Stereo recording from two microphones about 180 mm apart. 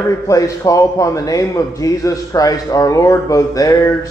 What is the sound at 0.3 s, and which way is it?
A man's voice, 20° left (ahead or behind).